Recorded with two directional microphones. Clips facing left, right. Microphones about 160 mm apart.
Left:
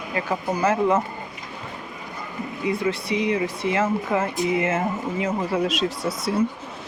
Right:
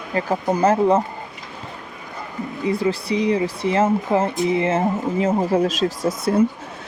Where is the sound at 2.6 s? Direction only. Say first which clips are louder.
Right 3 dB; 35° right (ahead or behind).